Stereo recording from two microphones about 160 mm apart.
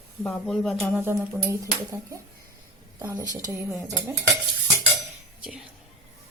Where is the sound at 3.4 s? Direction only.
20° right (ahead or behind).